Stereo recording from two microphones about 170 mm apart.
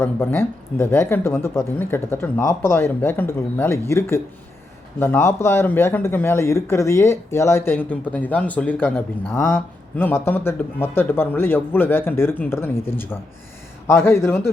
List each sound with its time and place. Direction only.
0.0 s speech: 15° left (ahead or behind)